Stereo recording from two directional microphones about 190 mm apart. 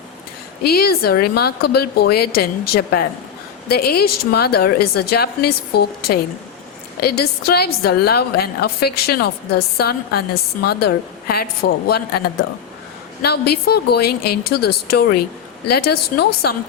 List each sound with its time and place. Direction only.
0.6 s a woman's voice: 55° left (ahead or behind)
13.2 s a woman's voice: 55° left (ahead or behind)